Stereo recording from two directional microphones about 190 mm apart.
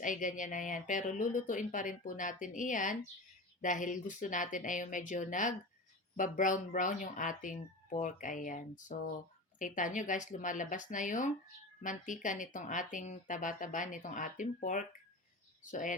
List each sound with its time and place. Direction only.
0.0 s speech: 45° left (ahead or behind)